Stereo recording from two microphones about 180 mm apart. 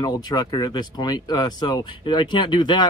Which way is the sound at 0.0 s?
20° left (ahead or behind).